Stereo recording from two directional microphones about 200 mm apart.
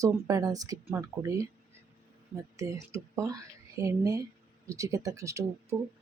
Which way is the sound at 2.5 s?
15° right (ahead or behind).